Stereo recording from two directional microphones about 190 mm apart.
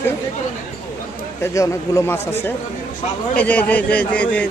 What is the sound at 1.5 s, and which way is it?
A man's voice, 15° left (ahead or behind).